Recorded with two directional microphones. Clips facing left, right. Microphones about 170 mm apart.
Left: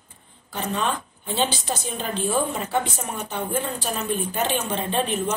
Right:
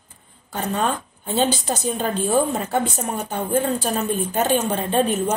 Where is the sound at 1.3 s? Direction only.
45° right (ahead or behind).